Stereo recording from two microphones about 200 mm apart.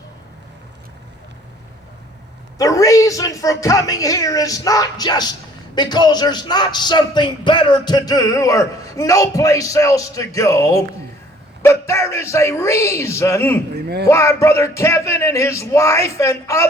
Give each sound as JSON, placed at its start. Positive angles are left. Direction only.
{"t": 2.6, "sound": "music", "side_deg": 15}
{"t": 13.7, "sound": "speech", "side_deg": -55}
{"t": 14.1, "sound": "music", "side_deg": 15}